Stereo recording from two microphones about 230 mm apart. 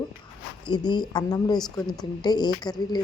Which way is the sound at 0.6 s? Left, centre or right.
Centre.